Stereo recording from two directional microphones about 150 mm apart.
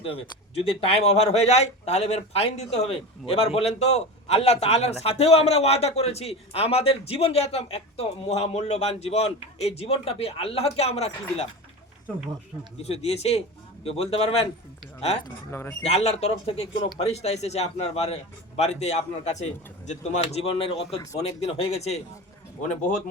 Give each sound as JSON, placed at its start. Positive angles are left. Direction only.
{"t": 0.0, "sound": "speech", "side_deg": 40}
{"t": 12.8, "sound": "speech", "side_deg": 45}
{"t": 15.4, "sound": "speech", "side_deg": 15}
{"t": 15.8, "sound": "speech", "side_deg": 45}